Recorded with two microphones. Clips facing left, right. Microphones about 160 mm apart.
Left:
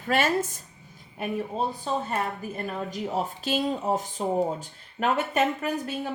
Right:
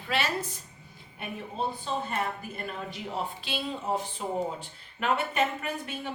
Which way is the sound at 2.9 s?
40° left (ahead or behind).